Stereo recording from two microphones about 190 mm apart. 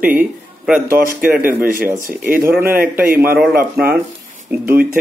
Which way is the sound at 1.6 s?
50° right (ahead or behind).